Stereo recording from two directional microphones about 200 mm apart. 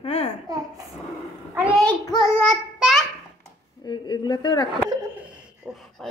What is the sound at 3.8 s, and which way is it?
Speech, 20° left (ahead or behind).